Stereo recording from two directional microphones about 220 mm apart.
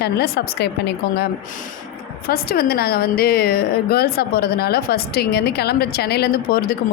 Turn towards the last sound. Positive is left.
turn(degrees=45)  # may be behind; listen again after turning